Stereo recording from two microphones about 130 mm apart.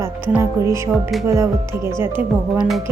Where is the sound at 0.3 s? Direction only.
20° right (ahead or behind).